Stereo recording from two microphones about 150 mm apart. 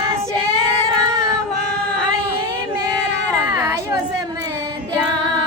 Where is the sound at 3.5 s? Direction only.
20° right (ahead or behind).